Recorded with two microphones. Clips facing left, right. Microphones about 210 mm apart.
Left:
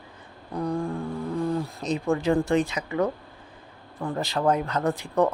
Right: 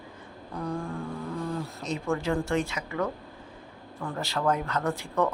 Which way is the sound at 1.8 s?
15° left (ahead or behind).